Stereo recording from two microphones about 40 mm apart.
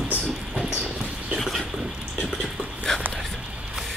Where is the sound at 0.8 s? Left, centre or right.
Right.